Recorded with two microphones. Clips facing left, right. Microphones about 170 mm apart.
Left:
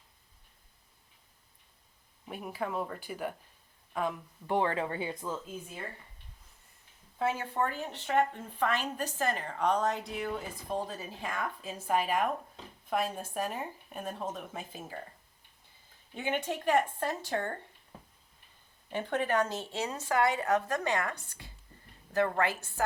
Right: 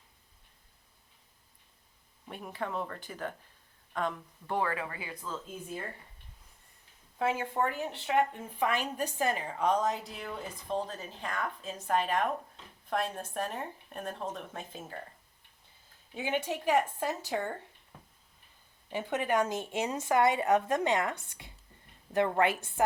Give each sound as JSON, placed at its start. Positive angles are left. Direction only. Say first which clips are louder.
{"t": 2.2, "sound": "a woman's voice", "louder": "left 2 dB", "side_deg": 5}
{"t": 4.4, "sound": "speech", "louder": "left 3 dB", "side_deg": 20}
{"t": 7.3, "sound": "a woman's voice", "louder": "right 1 dB", "side_deg": -15}
{"t": 16.1, "sound": "a woman's voice", "louder": "even", "side_deg": -5}
{"t": 18.9, "sound": "speech", "louder": "even", "side_deg": -10}